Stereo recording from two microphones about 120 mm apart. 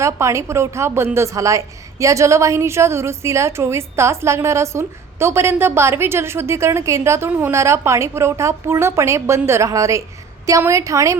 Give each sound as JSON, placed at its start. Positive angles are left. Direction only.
{"t": 0.0, "sound": "a woman's voice", "side_deg": -25}